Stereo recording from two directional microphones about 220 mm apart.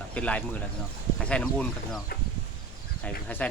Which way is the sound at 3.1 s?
5° left (ahead or behind).